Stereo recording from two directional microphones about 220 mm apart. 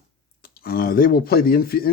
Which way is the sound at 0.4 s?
40° left (ahead or behind).